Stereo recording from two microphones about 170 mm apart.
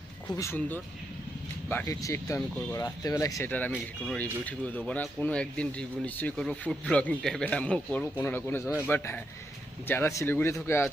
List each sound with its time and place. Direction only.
0.3 s speech: 15° left (ahead or behind)